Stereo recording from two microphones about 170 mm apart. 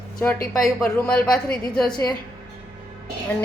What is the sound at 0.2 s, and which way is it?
A woman's voice, 10° left (ahead or behind).